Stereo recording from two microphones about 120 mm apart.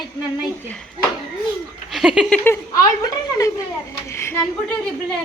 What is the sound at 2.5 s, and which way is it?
A woman's voice, 20° left (ahead or behind).